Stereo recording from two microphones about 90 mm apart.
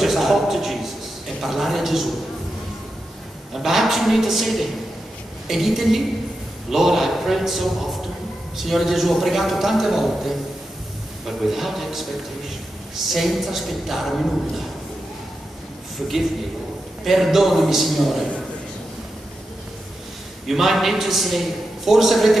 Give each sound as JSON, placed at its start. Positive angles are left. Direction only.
{"t": 0.0, "sound": "a sound", "side_deg": 0}
{"t": 1.4, "sound": "a man's voice", "side_deg": 0}
{"t": 3.5, "sound": "a man's voice", "side_deg": 0}
{"t": 13.1, "sound": "a man's voice", "side_deg": 0}
{"t": 17.0, "sound": "a man's voice", "side_deg": 0}
{"t": 20.4, "sound": "a man's voice", "side_deg": -5}